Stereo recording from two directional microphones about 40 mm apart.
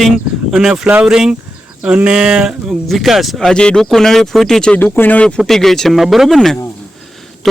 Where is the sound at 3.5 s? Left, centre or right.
Left.